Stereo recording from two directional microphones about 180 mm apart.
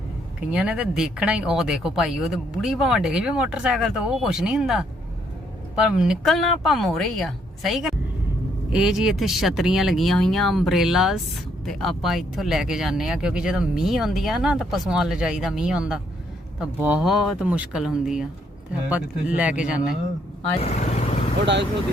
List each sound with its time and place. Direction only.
0.3 s speech: 5° right (ahead or behind)
20.6 s vehicle: 35° left (ahead or behind)
21.4 s speech: 75° right (ahead or behind)